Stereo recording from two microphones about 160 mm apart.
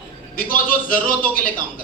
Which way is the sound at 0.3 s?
60° left (ahead or behind).